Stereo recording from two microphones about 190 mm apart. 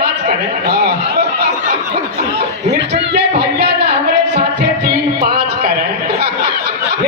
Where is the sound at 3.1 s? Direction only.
60° right (ahead or behind).